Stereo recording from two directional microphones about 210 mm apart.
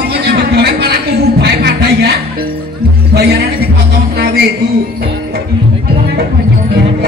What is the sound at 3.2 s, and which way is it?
Speech, 50° right (ahead or behind).